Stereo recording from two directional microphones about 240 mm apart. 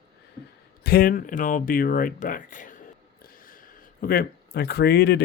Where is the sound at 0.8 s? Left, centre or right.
Left.